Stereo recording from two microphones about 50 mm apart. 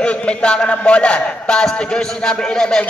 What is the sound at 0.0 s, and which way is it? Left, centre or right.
A man's voice, left.